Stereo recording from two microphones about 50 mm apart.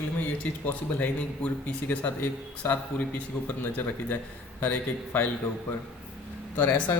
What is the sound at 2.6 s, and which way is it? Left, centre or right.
Speech, left.